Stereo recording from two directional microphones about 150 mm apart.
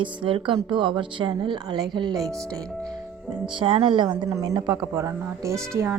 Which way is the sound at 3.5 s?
35° right (ahead or behind).